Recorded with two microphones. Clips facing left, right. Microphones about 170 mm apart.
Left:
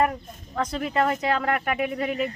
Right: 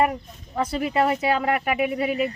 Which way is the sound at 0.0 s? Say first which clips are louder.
Right 2 dB; 10° right (ahead or behind).